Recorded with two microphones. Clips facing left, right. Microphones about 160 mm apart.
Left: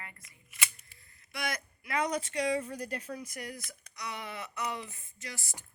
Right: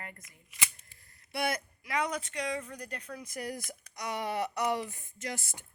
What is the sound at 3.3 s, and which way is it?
Speech, 35° right (ahead or behind).